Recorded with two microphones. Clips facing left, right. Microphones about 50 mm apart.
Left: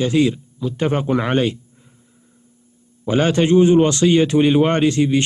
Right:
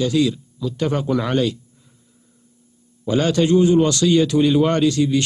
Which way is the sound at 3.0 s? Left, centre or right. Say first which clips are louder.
Left 1 dB; left.